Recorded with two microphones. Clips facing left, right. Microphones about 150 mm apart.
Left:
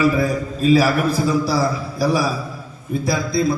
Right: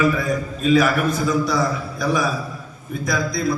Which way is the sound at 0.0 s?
35° left (ahead or behind).